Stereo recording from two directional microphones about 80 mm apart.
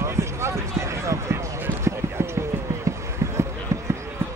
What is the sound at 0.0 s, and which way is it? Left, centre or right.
Basketball bounce, right.